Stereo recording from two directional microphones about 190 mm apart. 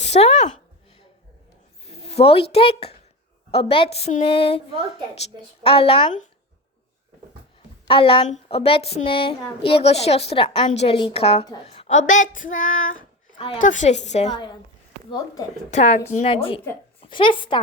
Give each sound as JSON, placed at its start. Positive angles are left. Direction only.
{"t": 0.0, "sound": "a sound", "side_deg": 35}
{"t": 1.8, "sound": "a woman's voice", "side_deg": 30}
{"t": 7.9, "sound": "a woman's voice", "side_deg": 30}
{"t": 11.6, "sound": "child singing", "side_deg": 35}
{"t": 13.6, "sound": "speech", "side_deg": 40}
{"t": 15.7, "sound": "a woman's voice", "side_deg": 35}